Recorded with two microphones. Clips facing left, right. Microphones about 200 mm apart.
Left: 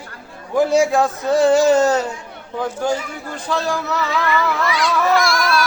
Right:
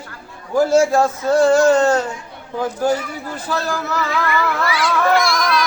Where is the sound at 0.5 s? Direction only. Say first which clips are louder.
Right 1 dB; centre (ahead or behind).